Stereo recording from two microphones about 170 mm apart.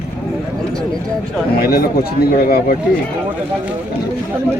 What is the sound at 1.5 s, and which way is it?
Speech, 60° left (ahead or behind).